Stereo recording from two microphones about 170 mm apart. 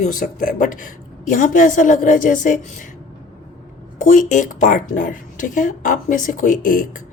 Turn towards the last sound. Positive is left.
turn(degrees=50)  # may be behind; listen again after turning